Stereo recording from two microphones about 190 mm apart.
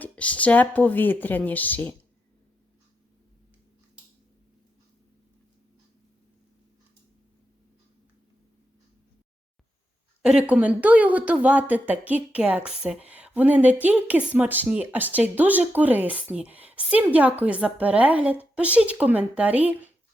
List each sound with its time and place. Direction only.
0.0 s speech: 5° left (ahead or behind)
10.2 s a woman's voice: 5° right (ahead or behind)